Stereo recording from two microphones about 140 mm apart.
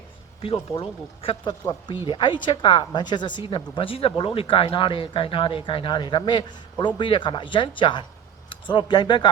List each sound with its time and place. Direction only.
0.8 s speech: 40° left (ahead or behind)